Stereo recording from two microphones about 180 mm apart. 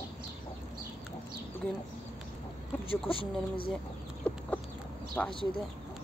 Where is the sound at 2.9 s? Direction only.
30° left (ahead or behind).